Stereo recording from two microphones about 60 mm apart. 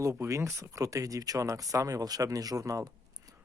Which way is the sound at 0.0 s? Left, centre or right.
Right.